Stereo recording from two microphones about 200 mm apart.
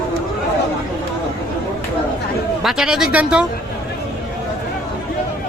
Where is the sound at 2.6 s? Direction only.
Centre (ahead or behind).